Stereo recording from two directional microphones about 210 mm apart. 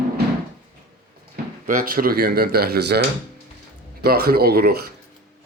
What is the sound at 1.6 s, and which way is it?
Speech, 40° right (ahead or behind).